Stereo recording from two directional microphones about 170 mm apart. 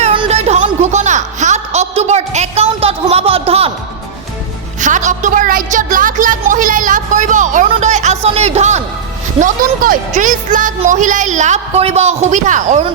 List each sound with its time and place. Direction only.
0.0 s music: 35° right (ahead or behind)
4.8 s a sound: 45° right (ahead or behind)
7.7 s music: 45° right (ahead or behind)
9.4 s a woman's voice: 50° right (ahead or behind)